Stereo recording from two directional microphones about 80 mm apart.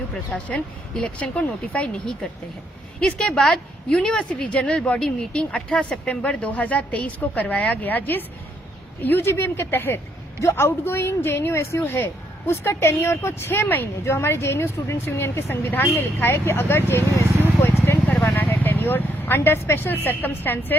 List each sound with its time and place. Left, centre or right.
0.5 s a woman's voice: centre
3.0 s a woman's voice: centre; by 17.0 s left
17.6 s a sound: left
18.3 s speech: left